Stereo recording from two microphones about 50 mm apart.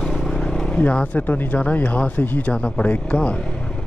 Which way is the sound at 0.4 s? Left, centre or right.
Centre.